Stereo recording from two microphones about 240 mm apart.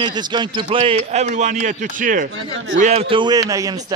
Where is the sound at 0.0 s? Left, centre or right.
Centre.